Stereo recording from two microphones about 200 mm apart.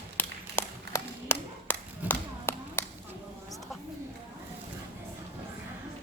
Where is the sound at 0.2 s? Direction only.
10° left (ahead or behind).